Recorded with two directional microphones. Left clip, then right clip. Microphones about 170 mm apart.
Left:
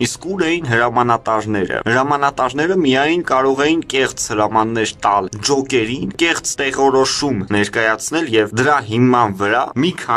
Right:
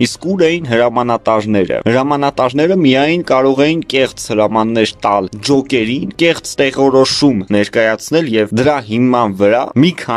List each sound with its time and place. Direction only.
0.0 s speech: 35° right (ahead or behind)